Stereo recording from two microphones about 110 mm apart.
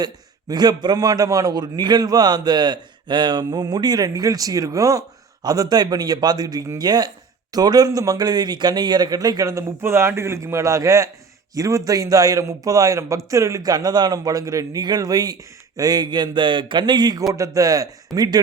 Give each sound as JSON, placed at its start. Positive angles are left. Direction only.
{"t": 0.0, "sound": "a man's voice", "side_deg": -40}